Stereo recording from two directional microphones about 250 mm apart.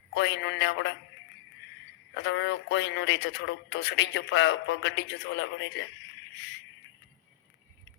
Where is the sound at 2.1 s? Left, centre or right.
Left.